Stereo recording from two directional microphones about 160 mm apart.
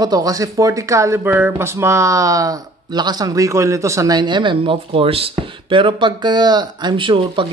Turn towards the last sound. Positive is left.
turn(degrees=-30)  # may be behind; listen again after turning